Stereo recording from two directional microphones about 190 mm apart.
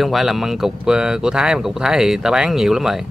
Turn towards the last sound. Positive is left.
turn(degrees=0)  # may be behind; listen again after turning